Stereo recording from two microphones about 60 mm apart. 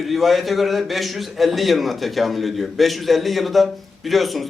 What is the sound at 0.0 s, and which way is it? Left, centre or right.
A man's voice, centre.